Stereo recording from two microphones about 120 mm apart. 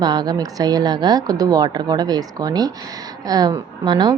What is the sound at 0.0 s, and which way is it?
A woman's voice, 35° right (ahead or behind).